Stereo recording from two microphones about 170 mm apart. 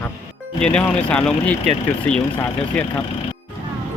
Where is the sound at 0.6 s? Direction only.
5° left (ahead or behind).